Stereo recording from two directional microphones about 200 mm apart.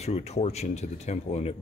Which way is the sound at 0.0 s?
35° left (ahead or behind).